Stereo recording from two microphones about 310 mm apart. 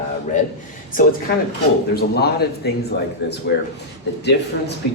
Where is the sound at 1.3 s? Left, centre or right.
Left.